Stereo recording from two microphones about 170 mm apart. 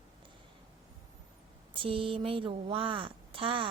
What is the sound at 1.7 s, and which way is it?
A woman's voice, 30° right (ahead or behind).